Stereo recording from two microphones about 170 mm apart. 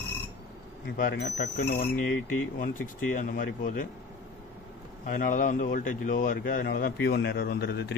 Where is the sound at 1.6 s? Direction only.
65° left (ahead or behind).